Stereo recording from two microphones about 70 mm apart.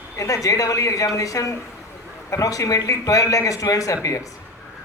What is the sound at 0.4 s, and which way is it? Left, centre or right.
Speech, left.